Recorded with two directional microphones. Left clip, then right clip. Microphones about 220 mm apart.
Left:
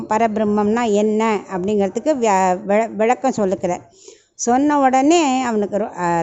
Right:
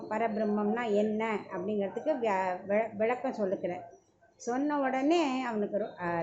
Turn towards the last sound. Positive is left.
turn(degrees=50)  # may be behind; listen again after turning